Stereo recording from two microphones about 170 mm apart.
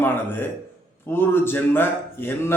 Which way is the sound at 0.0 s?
10° left (ahead or behind).